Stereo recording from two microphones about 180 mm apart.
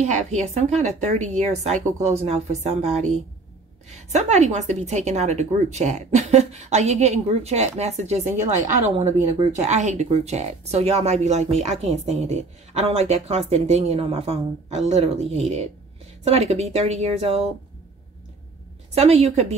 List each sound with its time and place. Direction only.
0.0 s a woman's voice: 40° right (ahead or behind)
18.9 s a woman's voice: 35° right (ahead or behind)